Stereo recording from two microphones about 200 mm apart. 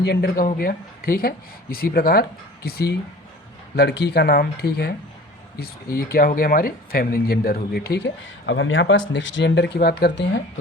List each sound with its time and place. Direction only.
0.0 s speech: 55° left (ahead or behind)